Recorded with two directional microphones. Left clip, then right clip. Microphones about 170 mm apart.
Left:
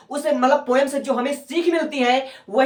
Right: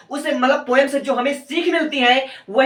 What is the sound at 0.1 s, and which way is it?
Speech, 25° left (ahead or behind).